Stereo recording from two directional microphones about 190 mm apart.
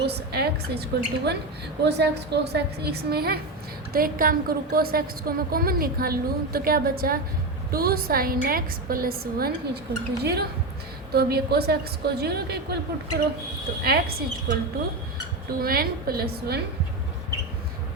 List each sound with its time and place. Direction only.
0.0 s a woman's voice: 60° right (ahead or behind)
13.8 s a woman's voice: 55° right (ahead or behind)
15.6 s a woman's voice: 50° right (ahead or behind)